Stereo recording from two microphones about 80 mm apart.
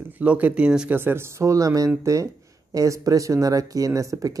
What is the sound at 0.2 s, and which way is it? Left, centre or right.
Speech, centre.